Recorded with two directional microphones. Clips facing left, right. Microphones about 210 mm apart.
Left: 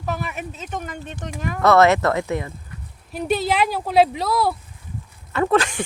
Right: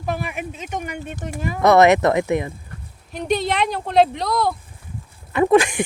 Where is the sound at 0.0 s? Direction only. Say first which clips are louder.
Right 2 dB; 10° right (ahead or behind).